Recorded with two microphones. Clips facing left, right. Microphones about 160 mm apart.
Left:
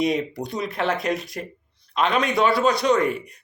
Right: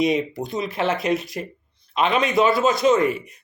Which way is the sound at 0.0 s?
Centre (ahead or behind).